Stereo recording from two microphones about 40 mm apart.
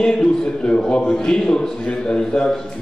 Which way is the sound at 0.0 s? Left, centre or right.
Centre.